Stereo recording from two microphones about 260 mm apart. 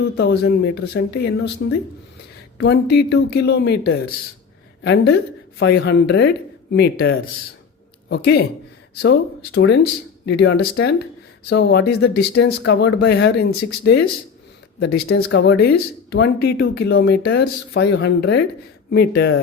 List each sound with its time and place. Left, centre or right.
0.0 s speech: left